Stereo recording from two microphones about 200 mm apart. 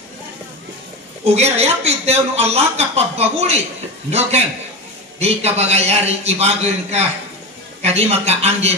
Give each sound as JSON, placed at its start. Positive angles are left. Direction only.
{"t": 1.2, "sound": "speech", "side_deg": -30}
{"t": 5.2, "sound": "speech", "side_deg": -30}